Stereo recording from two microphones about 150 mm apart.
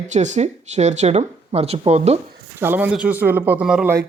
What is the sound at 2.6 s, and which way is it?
Speech, 15° right (ahead or behind).